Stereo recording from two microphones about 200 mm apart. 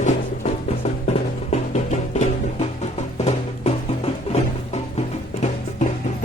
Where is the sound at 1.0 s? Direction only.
35° left (ahead or behind).